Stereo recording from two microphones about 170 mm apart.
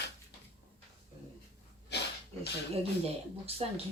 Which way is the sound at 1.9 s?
80° left.